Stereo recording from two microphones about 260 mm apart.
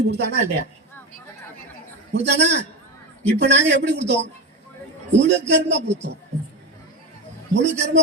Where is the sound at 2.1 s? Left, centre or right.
Right.